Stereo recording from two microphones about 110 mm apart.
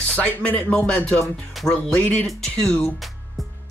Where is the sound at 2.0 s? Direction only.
15° left (ahead or behind).